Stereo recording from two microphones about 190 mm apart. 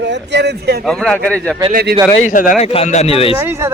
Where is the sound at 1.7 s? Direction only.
55° right (ahead or behind).